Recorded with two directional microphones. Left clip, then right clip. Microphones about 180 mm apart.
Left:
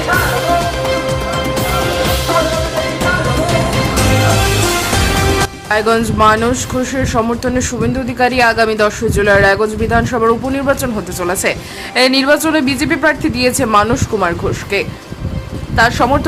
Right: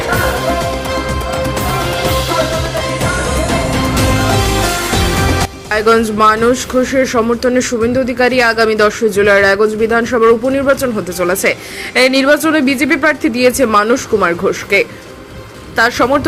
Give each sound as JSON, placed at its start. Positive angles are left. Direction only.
{"t": 5.7, "sound": "speech", "side_deg": -10}